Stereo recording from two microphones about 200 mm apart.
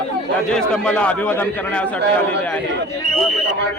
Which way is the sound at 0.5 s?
5° left (ahead or behind).